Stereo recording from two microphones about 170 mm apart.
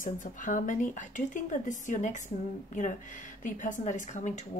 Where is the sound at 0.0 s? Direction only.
50° left (ahead or behind).